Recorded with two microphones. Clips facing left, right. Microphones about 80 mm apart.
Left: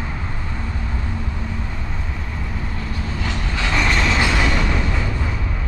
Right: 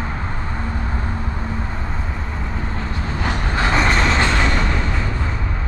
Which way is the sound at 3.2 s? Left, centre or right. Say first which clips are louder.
Right 5 dB; right.